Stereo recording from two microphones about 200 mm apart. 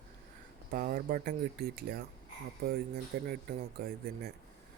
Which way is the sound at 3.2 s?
50° right (ahead or behind).